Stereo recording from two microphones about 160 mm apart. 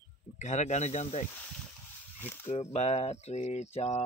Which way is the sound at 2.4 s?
40° left (ahead or behind).